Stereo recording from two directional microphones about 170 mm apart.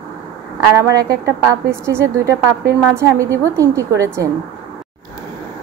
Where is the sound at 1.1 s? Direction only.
15° right (ahead or behind).